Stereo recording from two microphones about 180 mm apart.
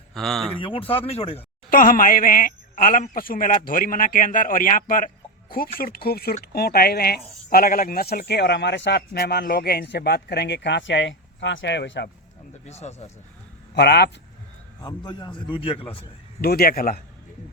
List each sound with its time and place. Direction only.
0.1 s speech: centre (ahead or behind)
0.6 s speech: 30° left (ahead or behind)
1.7 s speech: 50° left (ahead or behind); by 12.0 s 75° left (ahead or behind)
12.6 s speech: 35° left (ahead or behind)
13.7 s speech: 65° left (ahead or behind)
14.8 s a man's voice: 25° left (ahead or behind)
16.4 s speech: 55° left (ahead or behind)